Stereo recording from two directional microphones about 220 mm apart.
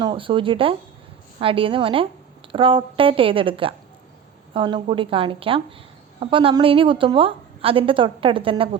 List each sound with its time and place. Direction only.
0.0 s a woman's voice: 20° right (ahead or behind)